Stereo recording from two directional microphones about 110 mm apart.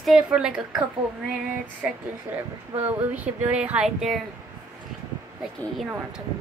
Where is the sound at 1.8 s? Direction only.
15° right (ahead or behind).